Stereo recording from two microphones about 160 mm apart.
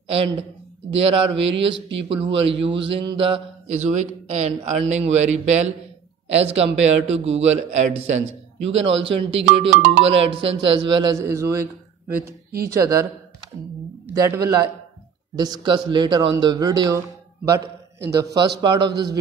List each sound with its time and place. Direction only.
0.1 s speech: 35° right (ahead or behind)
3.7 s a man's voice: 50° right (ahead or behind); by 11.7 s 20° right (ahead or behind)
12.7 s a man's voice: 20° right (ahead or behind)
14.1 s a man's voice: 20° right (ahead or behind)
18.1 s a man's voice: 25° right (ahead or behind)